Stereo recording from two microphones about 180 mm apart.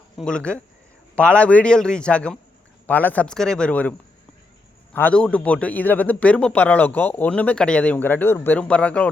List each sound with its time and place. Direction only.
0.2 s a man's voice: 5° left (ahead or behind)
4.9 s a man's voice: 10° left (ahead or behind)